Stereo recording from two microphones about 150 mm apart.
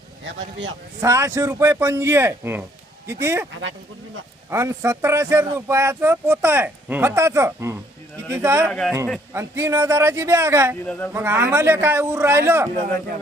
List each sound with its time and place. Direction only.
1.0 s speech: 20° right (ahead or behind)
4.4 s speech: 15° right (ahead or behind)
8.7 s a man's voice: 5° left (ahead or behind)
9.3 s speech: 20° right (ahead or behind)
10.8 s speech: 10° left (ahead or behind)
11.1 s speech: 15° right (ahead or behind)